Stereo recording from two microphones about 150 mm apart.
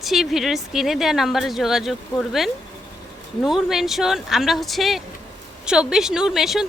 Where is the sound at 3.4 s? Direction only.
5° right (ahead or behind).